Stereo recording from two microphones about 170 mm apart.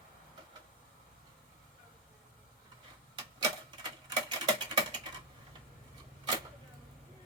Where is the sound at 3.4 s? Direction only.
25° right (ahead or behind).